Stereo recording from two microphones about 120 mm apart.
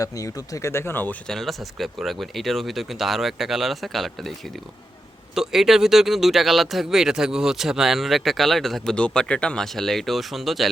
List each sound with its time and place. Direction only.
0.0 s speech: 30° left (ahead or behind)
1.3 s speech: centre (ahead or behind)